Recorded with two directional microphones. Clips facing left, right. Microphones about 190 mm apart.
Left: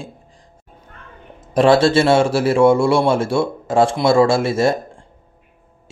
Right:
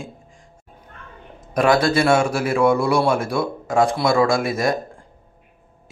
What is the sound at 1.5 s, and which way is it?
Speech, 30° left (ahead or behind).